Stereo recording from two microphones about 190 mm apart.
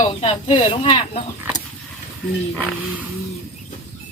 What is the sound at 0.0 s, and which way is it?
Speech, 30° left (ahead or behind).